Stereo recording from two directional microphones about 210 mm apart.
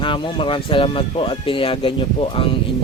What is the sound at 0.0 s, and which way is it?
Speech, 25° left (ahead or behind).